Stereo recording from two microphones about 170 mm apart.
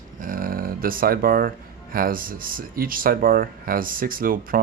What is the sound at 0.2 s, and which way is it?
A man's voice, 55° right (ahead or behind).